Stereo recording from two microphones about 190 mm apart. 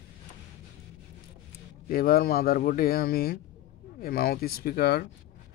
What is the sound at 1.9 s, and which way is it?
Speech, 50° left (ahead or behind).